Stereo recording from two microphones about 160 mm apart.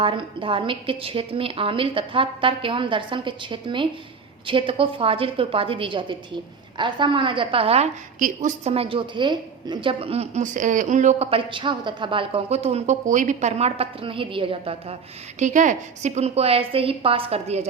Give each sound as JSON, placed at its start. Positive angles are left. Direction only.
{"t": 0.0, "sound": "a woman's voice", "side_deg": -30}
{"t": 8.2, "sound": "a woman's voice", "side_deg": -55}
{"t": 8.7, "sound": "a woman's voice", "side_deg": -35}
{"t": 15.4, "sound": "a woman's voice", "side_deg": -50}